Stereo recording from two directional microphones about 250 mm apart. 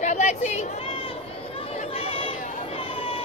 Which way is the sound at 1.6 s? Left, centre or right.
Left.